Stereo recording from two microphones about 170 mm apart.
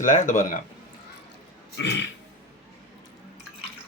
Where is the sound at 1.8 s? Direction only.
90° left.